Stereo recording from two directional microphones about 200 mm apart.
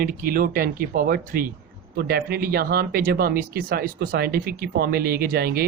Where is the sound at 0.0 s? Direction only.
45° right (ahead or behind).